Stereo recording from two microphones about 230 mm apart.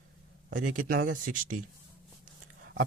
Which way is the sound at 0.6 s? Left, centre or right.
Right.